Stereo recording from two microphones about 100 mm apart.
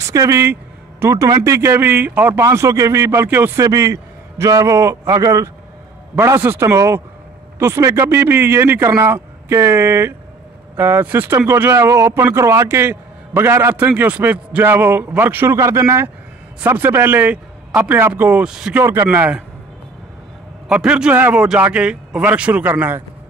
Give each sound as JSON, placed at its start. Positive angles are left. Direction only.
{"t": 0.0, "sound": "speech", "side_deg": -35}
{"t": 2.4, "sound": "a man's voice", "side_deg": -30}
{"t": 18.8, "sound": "speech", "side_deg": -25}
{"t": 20.6, "sound": "a man's voice", "side_deg": -10}